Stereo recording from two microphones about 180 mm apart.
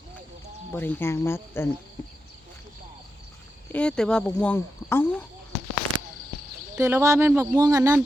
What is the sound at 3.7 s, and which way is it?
Speech, 5° left (ahead or behind).